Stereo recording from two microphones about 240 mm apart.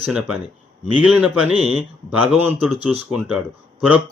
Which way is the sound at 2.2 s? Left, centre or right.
Centre.